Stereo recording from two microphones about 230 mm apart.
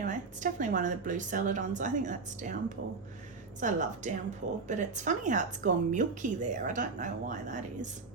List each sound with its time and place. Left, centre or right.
0.0 s a woman's voice: right